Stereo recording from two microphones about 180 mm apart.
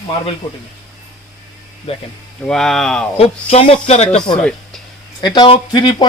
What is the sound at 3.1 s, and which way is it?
Speech, 35° left (ahead or behind).